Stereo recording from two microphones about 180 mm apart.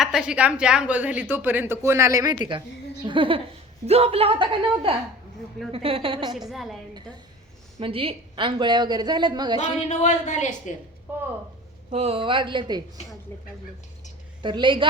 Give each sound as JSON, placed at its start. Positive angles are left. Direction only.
{"t": 0.0, "sound": "a woman's voice", "side_deg": -5}
{"t": 6.3, "sound": "a woman's voice", "side_deg": 0}
{"t": 7.8, "sound": "a woman's voice", "side_deg": -30}
{"t": 9.6, "sound": "speech", "side_deg": 40}
{"t": 11.1, "sound": "a sound", "side_deg": -10}
{"t": 11.9, "sound": "a woman's voice", "side_deg": -35}
{"t": 14.4, "sound": "a woman's voice", "side_deg": -25}